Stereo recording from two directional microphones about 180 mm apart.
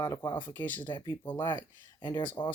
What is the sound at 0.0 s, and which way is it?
Speech, 20° left (ahead or behind).